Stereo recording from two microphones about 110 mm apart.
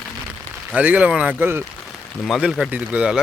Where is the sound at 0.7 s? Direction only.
10° right (ahead or behind).